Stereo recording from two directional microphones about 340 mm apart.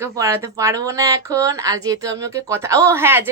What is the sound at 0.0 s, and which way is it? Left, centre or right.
Speech, centre.